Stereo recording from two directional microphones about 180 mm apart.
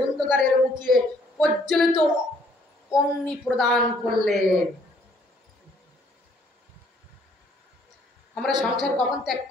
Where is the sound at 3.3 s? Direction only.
Centre (ahead or behind).